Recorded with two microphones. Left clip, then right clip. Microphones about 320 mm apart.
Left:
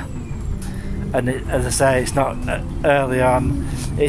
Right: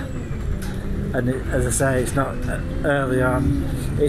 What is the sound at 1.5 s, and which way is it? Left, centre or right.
Speech, left.